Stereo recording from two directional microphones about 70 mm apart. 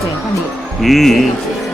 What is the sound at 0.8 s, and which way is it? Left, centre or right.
Speech, centre.